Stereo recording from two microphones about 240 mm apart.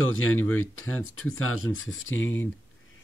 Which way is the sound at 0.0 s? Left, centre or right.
Left.